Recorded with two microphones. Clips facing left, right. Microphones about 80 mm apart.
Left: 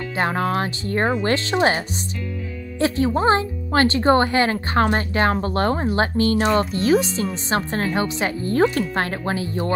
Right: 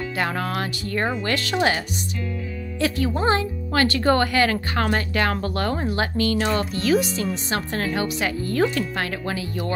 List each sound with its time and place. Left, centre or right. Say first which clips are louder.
0.1 s speech: left 6 dB; left